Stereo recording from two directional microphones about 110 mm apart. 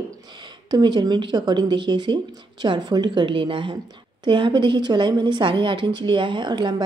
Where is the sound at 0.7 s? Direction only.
40° right (ahead or behind).